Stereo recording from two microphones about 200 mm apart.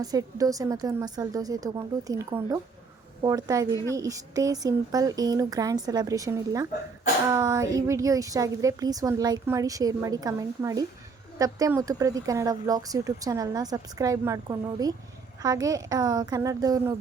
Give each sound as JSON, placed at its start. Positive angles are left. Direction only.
{"t": 0.0, "sound": "speech", "side_deg": -20}